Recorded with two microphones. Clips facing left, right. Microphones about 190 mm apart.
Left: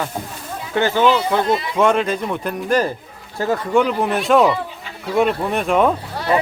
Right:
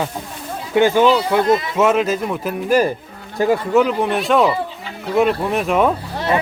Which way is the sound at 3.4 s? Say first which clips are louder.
Right 4 dB; 15° right (ahead or behind).